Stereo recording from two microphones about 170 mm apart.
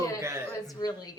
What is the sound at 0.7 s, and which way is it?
Speech, 25° left (ahead or behind).